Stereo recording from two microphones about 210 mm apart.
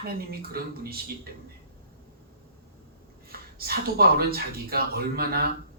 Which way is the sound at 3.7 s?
45° right (ahead or behind).